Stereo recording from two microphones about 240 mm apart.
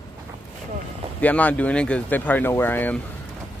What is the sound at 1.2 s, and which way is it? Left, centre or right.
Speech, centre.